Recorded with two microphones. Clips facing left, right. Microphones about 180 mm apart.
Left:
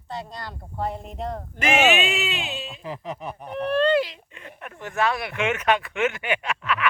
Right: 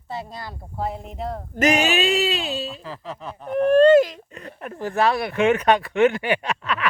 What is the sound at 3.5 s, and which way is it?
Speech, 45° right (ahead or behind).